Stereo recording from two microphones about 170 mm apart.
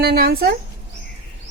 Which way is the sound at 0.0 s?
70° right (ahead or behind).